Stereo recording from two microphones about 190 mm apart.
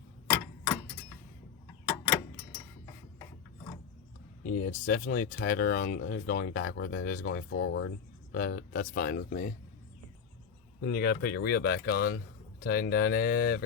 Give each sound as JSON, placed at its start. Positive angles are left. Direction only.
{"t": 4.4, "sound": "speech", "side_deg": 45}
{"t": 7.6, "sound": "speech", "side_deg": 90}
{"t": 8.3, "sound": "speech", "side_deg": 50}
{"t": 10.8, "sound": "speech", "side_deg": 60}